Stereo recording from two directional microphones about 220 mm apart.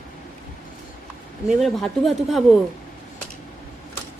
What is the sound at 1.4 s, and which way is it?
Speech, centre (ahead or behind).